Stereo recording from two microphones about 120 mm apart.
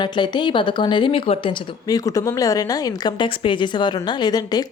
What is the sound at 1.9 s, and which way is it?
Speech, 30° left (ahead or behind).